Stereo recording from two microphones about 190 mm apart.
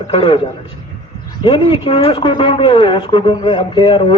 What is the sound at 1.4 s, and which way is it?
Speech, 25° left (ahead or behind).